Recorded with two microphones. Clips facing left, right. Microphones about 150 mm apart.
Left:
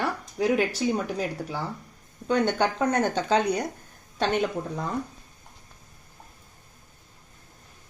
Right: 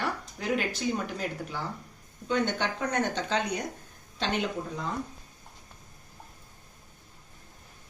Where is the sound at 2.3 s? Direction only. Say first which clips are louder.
Left 5 dB; 40° left (ahead or behind).